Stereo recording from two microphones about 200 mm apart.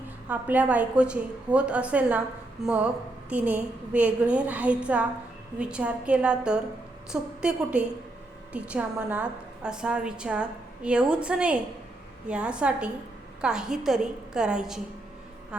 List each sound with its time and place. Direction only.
0.3 s a woman's voice: 5° right (ahead or behind)